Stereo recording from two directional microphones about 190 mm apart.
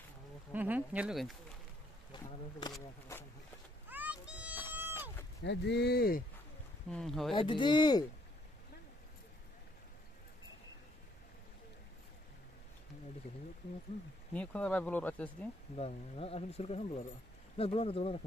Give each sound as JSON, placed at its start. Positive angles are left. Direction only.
{"t": 0.5, "sound": "speech", "side_deg": -10}
{"t": 2.1, "sound": "a sound", "side_deg": 25}
{"t": 3.9, "sound": "a sound", "side_deg": -5}
{"t": 4.7, "sound": "vehicle", "side_deg": -10}
{"t": 5.4, "sound": "speech", "side_deg": 65}
{"t": 6.9, "sound": "speech", "side_deg": 5}
{"t": 7.3, "sound": "speech", "side_deg": 25}
{"t": 14.3, "sound": "speech", "side_deg": 5}
{"t": 15.7, "sound": "speech", "side_deg": 30}